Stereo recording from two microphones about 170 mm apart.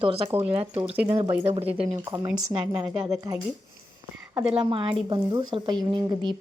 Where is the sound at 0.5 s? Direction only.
35° right (ahead or behind).